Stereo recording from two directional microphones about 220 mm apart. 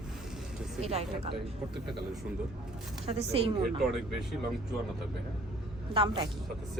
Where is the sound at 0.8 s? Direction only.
30° right (ahead or behind).